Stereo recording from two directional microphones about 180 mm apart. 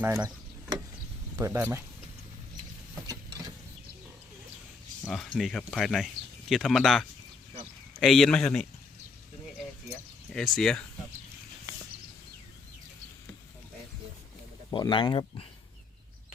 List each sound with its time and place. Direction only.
0.0 s speech: 15° right (ahead or behind)
1.4 s speech: 15° right (ahead or behind)
3.1 s vehicle: 20° right (ahead or behind)
5.0 s speech: 5° left (ahead or behind)
10.2 s speech: 5° left (ahead or behind)
14.7 s speech: 25° left (ahead or behind)